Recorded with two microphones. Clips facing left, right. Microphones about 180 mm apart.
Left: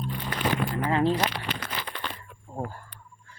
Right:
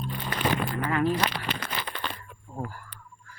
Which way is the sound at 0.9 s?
25° left (ahead or behind).